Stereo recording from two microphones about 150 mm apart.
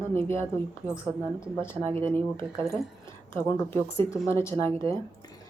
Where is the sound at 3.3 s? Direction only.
15° left (ahead or behind).